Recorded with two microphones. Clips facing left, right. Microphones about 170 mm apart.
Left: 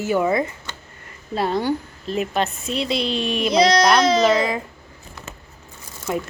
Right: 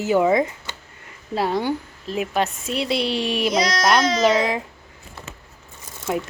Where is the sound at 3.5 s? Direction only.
25° left (ahead or behind).